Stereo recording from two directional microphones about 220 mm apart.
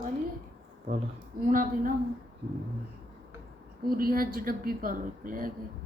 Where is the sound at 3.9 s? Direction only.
40° right (ahead or behind).